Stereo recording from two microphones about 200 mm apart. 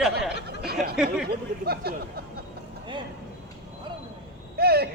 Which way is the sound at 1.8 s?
50° right (ahead or behind).